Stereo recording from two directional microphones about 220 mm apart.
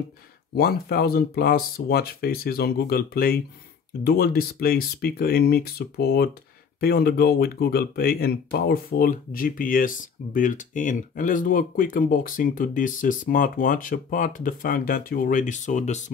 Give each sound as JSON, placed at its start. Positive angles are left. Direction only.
{"t": 0.6, "sound": "speech", "side_deg": 45}